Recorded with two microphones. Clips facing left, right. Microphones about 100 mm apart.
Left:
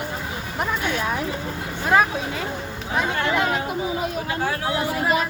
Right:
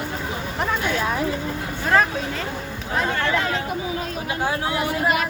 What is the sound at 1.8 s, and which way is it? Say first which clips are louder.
Speech: left 1 dB; 10° left (ahead or behind).